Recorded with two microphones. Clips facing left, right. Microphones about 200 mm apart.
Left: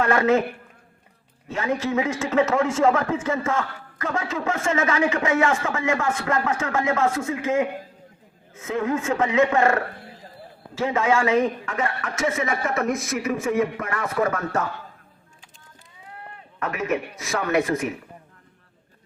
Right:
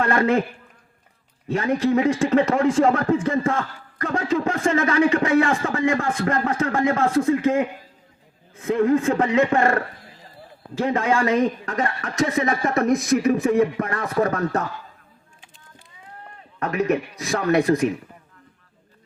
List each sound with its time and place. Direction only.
0.0 s a man's voice: 30° right (ahead or behind)
1.5 s a man's voice: 35° right (ahead or behind)
16.6 s a man's voice: 35° right (ahead or behind)